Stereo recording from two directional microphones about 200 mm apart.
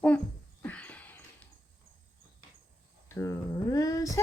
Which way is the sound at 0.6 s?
5° left (ahead or behind).